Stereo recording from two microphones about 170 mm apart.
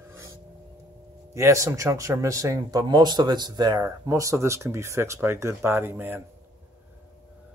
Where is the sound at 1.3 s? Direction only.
15° right (ahead or behind).